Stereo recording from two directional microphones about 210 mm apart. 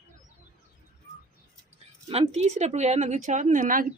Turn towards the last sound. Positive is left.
turn(degrees=-40)  # may be behind; listen again after turning